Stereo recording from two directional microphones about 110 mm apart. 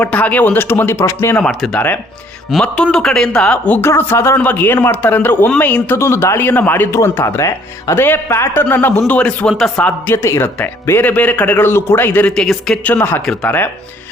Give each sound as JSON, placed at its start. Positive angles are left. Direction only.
{"t": 0.0, "sound": "speech", "side_deg": 15}
{"t": 1.5, "sound": "speech", "side_deg": 0}
{"t": 10.1, "sound": "speech", "side_deg": 25}
{"t": 12.3, "sound": "speech", "side_deg": 5}
{"t": 13.2, "sound": "speech", "side_deg": 5}